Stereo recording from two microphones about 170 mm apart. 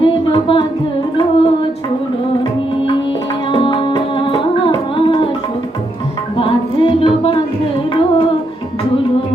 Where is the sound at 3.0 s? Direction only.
30° left (ahead or behind).